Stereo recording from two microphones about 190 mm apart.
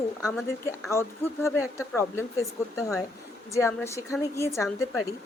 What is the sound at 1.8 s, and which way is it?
A woman's voice, 15° left (ahead or behind).